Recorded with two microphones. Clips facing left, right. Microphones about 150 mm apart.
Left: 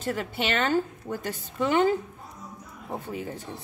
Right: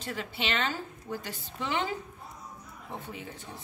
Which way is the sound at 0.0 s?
50° left (ahead or behind).